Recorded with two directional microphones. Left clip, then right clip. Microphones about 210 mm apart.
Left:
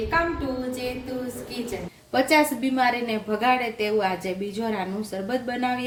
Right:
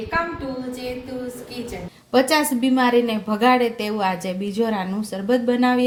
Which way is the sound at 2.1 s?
40° right (ahead or behind).